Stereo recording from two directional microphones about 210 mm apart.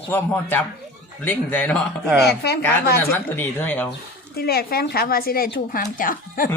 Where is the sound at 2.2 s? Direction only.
50° left (ahead or behind).